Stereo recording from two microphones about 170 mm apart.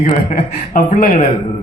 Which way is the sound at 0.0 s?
45° left (ahead or behind).